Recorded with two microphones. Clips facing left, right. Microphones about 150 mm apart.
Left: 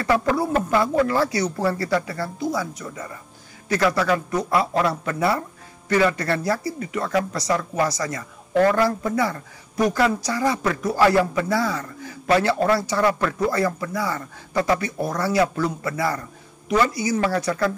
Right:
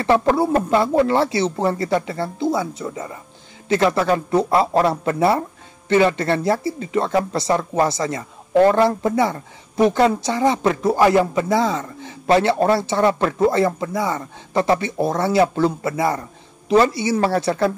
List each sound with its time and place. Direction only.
0.0 s a man's voice: 25° right (ahead or behind)